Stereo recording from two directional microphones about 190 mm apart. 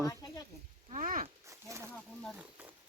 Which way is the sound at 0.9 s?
45° right (ahead or behind).